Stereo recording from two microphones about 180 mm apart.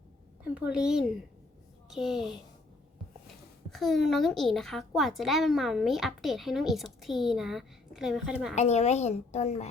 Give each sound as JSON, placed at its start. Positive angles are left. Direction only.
{"t": 0.4, "sound": "a child's voice", "side_deg": -5}
{"t": 3.7, "sound": "a child's voice", "side_deg": 0}
{"t": 8.5, "sound": "a woman's voice", "side_deg": 40}